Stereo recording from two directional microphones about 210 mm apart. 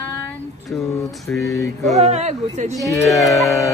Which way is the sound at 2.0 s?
30° right (ahead or behind).